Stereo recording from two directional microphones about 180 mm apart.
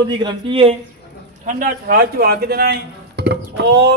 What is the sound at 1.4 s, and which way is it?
Speech, 50° right (ahead or behind).